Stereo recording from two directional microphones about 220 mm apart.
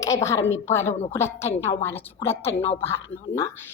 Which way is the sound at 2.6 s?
25° left (ahead or behind).